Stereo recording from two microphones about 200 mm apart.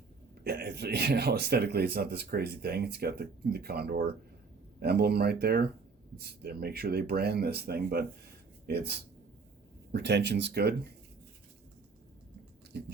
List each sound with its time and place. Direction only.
0.4 s speech: 55° right (ahead or behind)
12.7 s speech: 55° right (ahead or behind)